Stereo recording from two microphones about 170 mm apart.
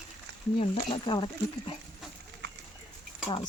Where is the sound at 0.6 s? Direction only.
30° left (ahead or behind).